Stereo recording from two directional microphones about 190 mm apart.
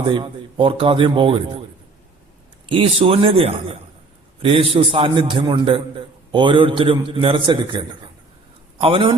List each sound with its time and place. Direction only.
0.0 s speech: 25° right (ahead or behind)
2.6 s speech: 30° right (ahead or behind)